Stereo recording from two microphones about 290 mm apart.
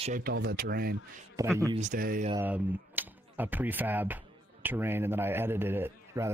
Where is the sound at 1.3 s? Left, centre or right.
Centre.